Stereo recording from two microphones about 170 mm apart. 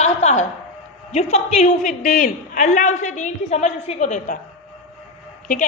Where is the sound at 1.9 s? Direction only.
50° left (ahead or behind).